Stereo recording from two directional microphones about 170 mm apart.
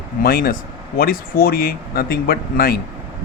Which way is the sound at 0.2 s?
60° left (ahead or behind).